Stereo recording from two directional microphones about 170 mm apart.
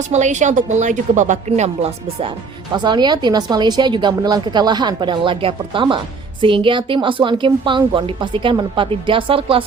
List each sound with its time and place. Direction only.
0.1 s speech: 45° right (ahead or behind)
2.7 s a woman's voice: 25° right (ahead or behind)